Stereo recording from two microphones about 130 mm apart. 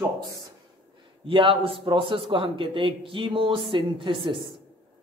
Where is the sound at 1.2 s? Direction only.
40° right (ahead or behind).